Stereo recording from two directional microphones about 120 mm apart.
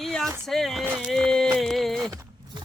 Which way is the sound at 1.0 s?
Centre (ahead or behind).